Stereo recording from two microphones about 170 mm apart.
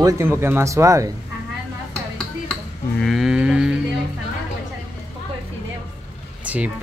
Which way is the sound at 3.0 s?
Centre (ahead or behind).